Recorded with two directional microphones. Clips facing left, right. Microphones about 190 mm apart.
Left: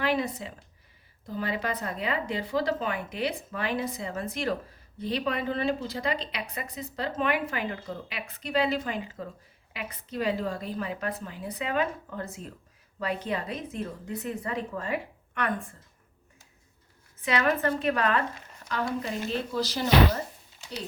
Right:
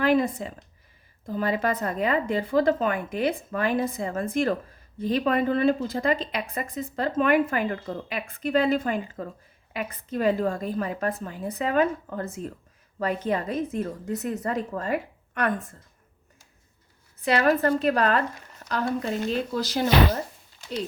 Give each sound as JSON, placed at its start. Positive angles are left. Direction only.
{"t": 0.0, "sound": "a woman's voice", "side_deg": -50}
{"t": 17.2, "sound": "a woman's voice", "side_deg": -35}
{"t": 19.5, "sound": "a woman's voice", "side_deg": -50}